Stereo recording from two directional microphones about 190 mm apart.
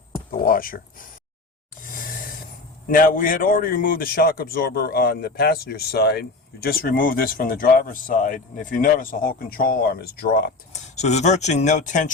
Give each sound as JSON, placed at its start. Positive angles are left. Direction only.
{"t": 0.3, "sound": "speech", "side_deg": 50}
{"t": 1.8, "sound": "a sound", "side_deg": 45}
{"t": 2.9, "sound": "speech", "side_deg": 45}
{"t": 10.7, "sound": "speech", "side_deg": 35}